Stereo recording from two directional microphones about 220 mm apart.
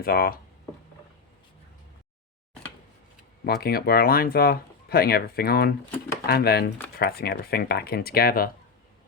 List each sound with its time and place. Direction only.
0.0 s speech: 45° left (ahead or behind)
3.4 s speech: 45° left (ahead or behind)